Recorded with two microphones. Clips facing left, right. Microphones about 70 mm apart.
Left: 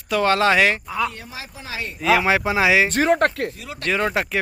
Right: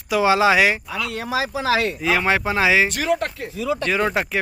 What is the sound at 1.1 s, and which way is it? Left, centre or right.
Speech, right.